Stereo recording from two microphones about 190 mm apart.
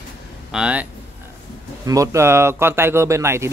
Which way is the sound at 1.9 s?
15° right (ahead or behind).